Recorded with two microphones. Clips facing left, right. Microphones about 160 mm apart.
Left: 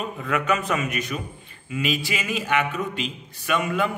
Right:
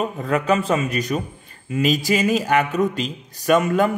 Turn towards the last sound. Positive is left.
turn(degrees=-40)  # may be behind; listen again after turning